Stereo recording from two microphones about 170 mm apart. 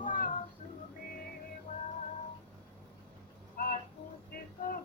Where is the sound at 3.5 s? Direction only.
55° left (ahead or behind).